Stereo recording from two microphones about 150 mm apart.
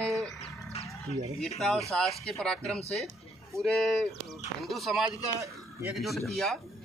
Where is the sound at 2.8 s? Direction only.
45° left (ahead or behind).